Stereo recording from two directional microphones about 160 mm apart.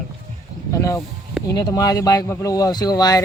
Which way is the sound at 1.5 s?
25° left (ahead or behind).